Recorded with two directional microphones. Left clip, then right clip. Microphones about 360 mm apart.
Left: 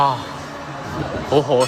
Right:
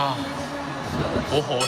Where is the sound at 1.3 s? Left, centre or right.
Centre.